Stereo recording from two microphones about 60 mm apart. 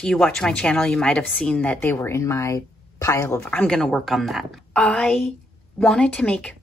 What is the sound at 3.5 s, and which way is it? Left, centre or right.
Speech, centre.